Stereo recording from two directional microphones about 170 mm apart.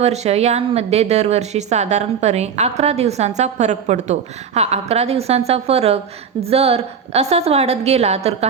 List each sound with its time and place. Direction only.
0.0 s speech: 40° right (ahead or behind)